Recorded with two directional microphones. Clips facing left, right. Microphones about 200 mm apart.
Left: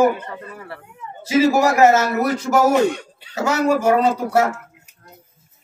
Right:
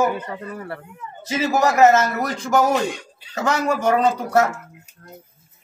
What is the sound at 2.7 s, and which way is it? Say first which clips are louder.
Speech: left 6 dB; 60° left (ahead or behind).